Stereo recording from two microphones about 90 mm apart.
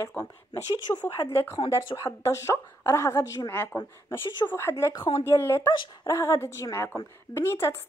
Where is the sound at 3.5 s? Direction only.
20° left (ahead or behind).